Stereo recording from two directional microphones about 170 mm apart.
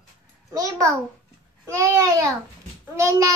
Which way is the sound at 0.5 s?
20° right (ahead or behind).